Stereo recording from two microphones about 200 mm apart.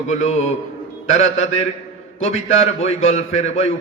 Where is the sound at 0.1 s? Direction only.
35° left (ahead or behind).